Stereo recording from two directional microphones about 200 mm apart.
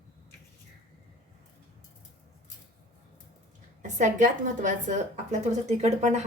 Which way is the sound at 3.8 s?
40° right (ahead or behind).